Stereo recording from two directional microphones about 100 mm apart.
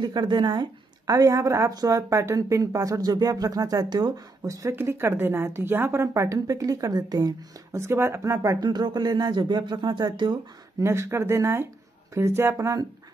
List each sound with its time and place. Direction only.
0.0 s a woman's voice: 45° right (ahead or behind)
8.6 s speech: 45° right (ahead or behind)
10.8 s a woman's voice: 25° right (ahead or behind)